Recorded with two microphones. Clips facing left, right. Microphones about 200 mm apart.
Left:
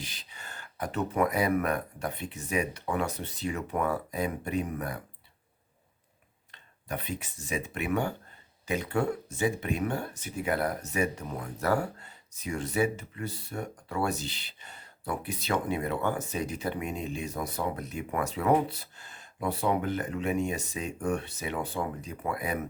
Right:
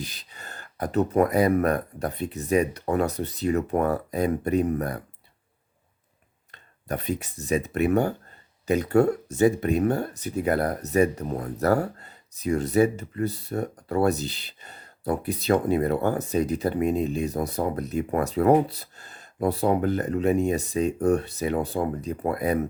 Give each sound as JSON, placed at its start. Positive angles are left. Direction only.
{"t": 0.0, "sound": "speech", "side_deg": -40}
{"t": 6.5, "sound": "speech", "side_deg": -40}